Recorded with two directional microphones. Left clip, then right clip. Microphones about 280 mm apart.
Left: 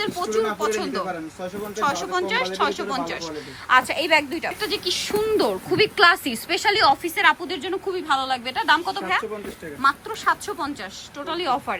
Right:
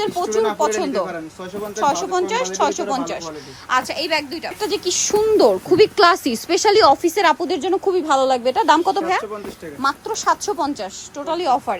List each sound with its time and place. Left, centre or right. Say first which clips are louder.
0.0 s a woman's voice: right 4 dB; centre